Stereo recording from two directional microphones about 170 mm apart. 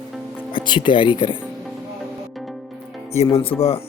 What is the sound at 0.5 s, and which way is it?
Speech, 25° left (ahead or behind).